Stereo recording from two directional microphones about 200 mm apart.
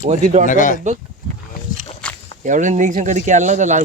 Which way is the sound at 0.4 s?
40° left (ahead or behind).